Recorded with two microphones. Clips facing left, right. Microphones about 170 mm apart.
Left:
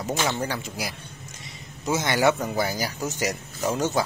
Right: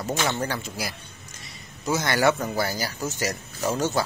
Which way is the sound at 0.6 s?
15° left (ahead or behind).